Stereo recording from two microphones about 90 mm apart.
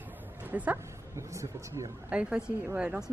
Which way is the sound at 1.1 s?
35° right (ahead or behind).